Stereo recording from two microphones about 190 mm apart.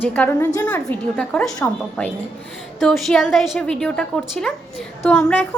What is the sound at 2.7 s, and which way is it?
A woman's voice, centre (ahead or behind).